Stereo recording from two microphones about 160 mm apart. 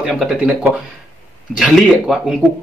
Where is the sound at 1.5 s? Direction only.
5° right (ahead or behind).